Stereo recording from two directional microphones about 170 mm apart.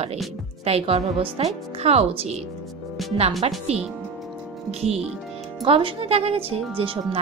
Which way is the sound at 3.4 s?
35° right (ahead or behind).